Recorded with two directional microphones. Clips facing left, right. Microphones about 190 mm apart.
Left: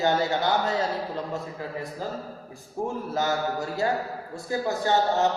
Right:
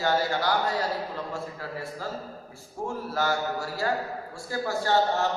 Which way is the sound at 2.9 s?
20° left (ahead or behind).